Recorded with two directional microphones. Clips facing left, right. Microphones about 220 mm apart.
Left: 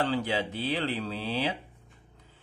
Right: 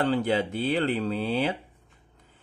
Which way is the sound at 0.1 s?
50° right (ahead or behind).